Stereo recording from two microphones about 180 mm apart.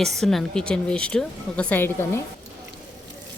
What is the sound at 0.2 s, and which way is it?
A woman's voice, centre (ahead or behind).